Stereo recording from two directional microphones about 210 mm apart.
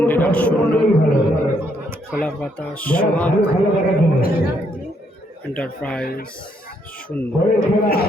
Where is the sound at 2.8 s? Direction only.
5° left (ahead or behind).